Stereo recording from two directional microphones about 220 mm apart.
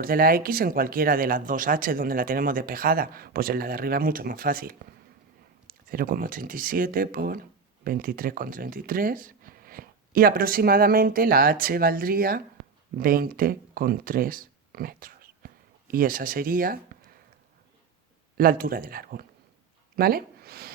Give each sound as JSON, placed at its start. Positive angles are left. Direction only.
{"t": 0.0, "sound": "speech", "side_deg": -40}
{"t": 18.3, "sound": "speech", "side_deg": -40}